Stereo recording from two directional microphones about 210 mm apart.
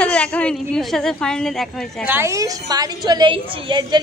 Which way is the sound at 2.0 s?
10° right (ahead or behind).